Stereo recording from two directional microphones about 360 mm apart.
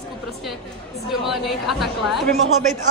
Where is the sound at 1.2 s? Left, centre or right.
Centre.